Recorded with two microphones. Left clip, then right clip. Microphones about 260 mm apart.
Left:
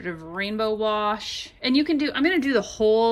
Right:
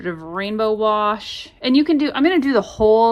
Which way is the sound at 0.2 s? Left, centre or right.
Centre.